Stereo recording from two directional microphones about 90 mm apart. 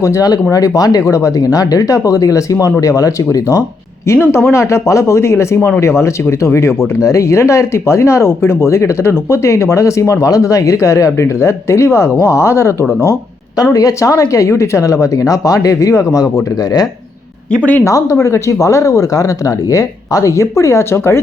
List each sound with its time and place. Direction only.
0.0 s speech: 40° left (ahead or behind)
13.7 s speech: 40° left (ahead or behind)
17.8 s speech: 35° left (ahead or behind)